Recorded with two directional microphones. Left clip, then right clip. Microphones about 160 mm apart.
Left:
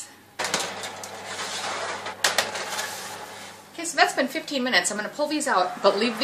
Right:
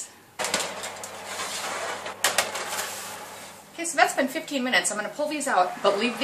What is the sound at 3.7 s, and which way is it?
Speech, 50° left (ahead or behind).